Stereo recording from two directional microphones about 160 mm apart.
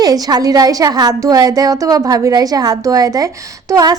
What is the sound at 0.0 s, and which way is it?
A woman's voice, 25° right (ahead or behind).